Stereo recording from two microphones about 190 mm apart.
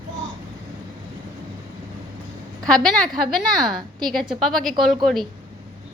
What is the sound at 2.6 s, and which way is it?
Speech, 5° left (ahead or behind).